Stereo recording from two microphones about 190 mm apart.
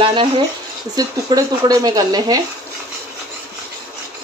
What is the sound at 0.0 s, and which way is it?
Speech, 25° right (ahead or behind).